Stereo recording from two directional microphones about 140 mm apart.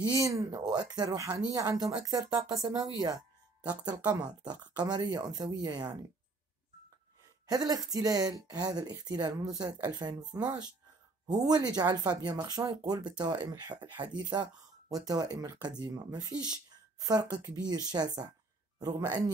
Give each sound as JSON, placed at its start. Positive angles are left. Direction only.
{"t": 0.0, "sound": "speech", "side_deg": -25}
{"t": 7.4, "sound": "speech", "side_deg": -25}